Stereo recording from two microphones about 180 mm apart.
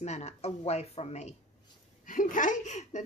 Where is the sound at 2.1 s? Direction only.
45° left (ahead or behind).